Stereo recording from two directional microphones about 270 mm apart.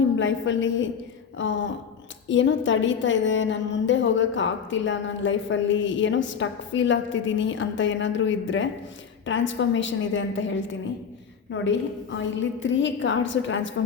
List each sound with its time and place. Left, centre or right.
0.2 s a woman's voice: left